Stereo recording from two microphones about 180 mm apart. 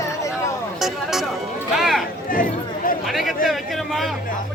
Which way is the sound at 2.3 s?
50° left (ahead or behind).